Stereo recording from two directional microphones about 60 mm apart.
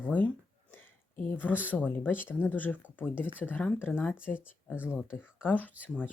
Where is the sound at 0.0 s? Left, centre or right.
Left.